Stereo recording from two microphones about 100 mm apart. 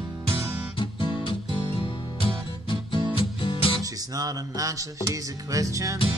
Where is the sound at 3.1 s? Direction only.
60° left (ahead or behind).